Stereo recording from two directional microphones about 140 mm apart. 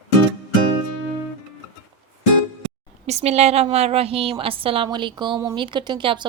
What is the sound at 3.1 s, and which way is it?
A woman's voice, 50° right (ahead or behind).